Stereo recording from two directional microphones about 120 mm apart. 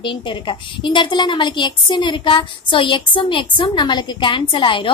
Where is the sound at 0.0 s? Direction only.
45° left (ahead or behind).